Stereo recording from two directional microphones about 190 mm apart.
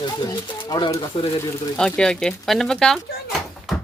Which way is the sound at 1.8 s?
5° left (ahead or behind).